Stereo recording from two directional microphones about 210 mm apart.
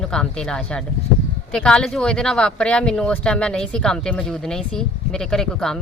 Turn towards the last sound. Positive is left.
turn(degrees=0)  # may be behind; listen again after turning